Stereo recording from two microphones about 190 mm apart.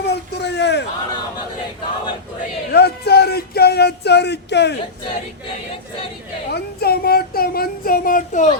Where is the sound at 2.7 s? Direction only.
60° left (ahead or behind).